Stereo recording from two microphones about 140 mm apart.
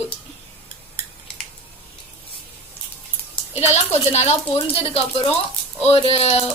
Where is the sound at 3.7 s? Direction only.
50° left (ahead or behind).